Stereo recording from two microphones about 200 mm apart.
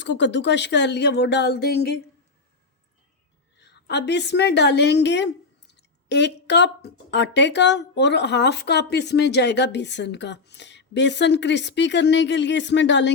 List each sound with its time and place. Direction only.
0.0 s speech: 60° left (ahead or behind)
3.6 s speech: 60° left (ahead or behind)